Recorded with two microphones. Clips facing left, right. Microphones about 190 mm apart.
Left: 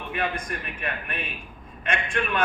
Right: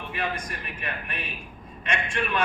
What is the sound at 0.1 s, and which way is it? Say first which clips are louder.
A man's voice: left 3 dB; 50° left (ahead or behind).